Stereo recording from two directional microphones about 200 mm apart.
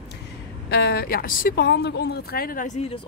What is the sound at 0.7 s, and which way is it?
Speech, 50° left (ahead or behind).